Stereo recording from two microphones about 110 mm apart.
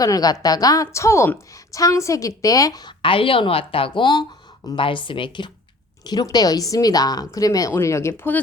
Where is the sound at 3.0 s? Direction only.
55° left (ahead or behind).